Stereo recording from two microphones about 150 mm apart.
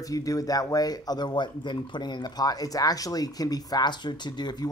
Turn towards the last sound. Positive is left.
turn(degrees=30)  # may be behind; listen again after turning